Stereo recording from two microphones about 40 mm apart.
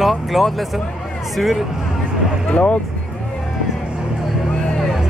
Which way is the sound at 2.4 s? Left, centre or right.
Left.